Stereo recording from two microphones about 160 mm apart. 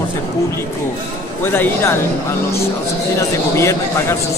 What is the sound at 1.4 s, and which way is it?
Speech, 15° left (ahead or behind).